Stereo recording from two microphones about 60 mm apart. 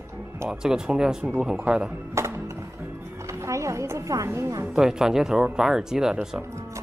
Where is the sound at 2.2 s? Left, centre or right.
Right.